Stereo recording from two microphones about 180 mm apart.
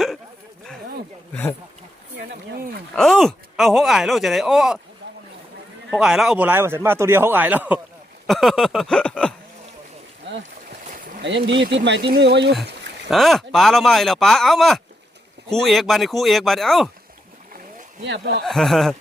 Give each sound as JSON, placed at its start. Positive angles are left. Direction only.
{"t": 1.3, "sound": "speech", "side_deg": 10}
{"t": 2.1, "sound": "a sound", "side_deg": -60}
{"t": 2.9, "sound": "speech", "side_deg": 0}
{"t": 5.0, "sound": "boat", "side_deg": -65}
{"t": 5.9, "sound": "speech", "side_deg": -5}
{"t": 11.2, "sound": "speech", "side_deg": -80}
{"t": 13.1, "sound": "speech", "side_deg": 0}
{"t": 18.0, "sound": "speech", "side_deg": -75}
{"t": 18.4, "sound": "speech", "side_deg": 0}